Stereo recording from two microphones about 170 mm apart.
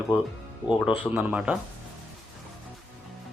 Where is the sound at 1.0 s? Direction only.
10° right (ahead or behind).